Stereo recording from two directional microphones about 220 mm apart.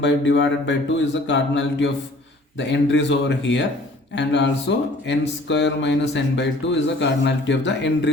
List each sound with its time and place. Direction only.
0.0 s speech: 55° left (ahead or behind)